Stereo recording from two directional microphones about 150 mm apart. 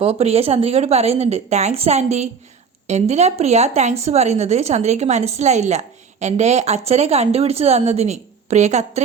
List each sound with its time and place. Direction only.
0.0 s speech: 40° right (ahead or behind)